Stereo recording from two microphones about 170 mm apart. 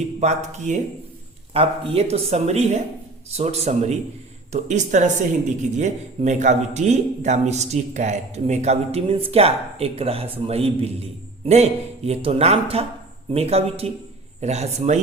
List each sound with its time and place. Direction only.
0.2 s speech: 45° right (ahead or behind)